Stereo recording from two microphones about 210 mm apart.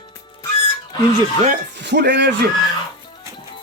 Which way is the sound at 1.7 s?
55° right (ahead or behind).